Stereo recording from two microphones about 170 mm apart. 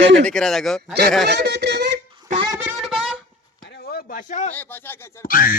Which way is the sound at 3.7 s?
70° left (ahead or behind).